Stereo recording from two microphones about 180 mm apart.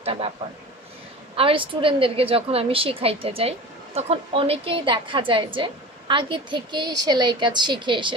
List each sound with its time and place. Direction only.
0.0 s a man's voice: 35° right (ahead or behind)
1.3 s a woman's voice: 30° right (ahead or behind)